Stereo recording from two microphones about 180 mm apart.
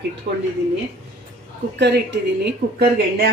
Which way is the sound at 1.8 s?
70° right (ahead or behind).